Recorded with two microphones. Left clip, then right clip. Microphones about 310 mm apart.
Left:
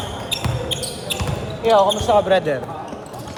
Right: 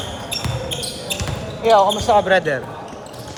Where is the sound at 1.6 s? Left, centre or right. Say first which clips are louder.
Right 1 dB; right.